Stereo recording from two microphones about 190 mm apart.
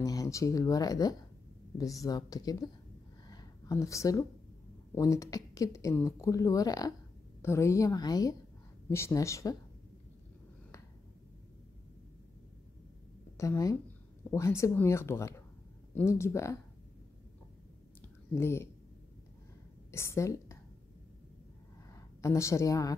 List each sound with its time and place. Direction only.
0.0 s speech: 20° left (ahead or behind)
3.3 s a sound: 20° left (ahead or behind)
4.9 s a woman's voice: 15° left (ahead or behind)
13.4 s a woman's voice: 15° left (ahead or behind)
18.0 s a sound: 15° left (ahead or behind)
19.9 s a woman's voice: 15° left (ahead or behind)
21.9 s a woman's voice: 15° left (ahead or behind)